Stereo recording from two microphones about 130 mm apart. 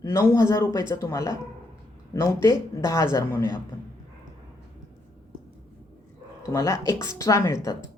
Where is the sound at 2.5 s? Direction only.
25° left (ahead or behind).